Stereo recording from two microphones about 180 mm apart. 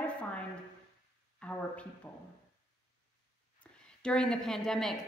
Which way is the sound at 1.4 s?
5° left (ahead or behind).